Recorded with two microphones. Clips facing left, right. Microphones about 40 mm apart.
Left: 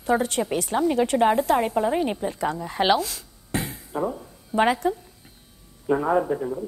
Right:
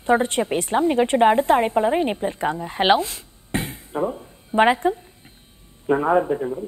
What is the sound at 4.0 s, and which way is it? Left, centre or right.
A man's voice, centre.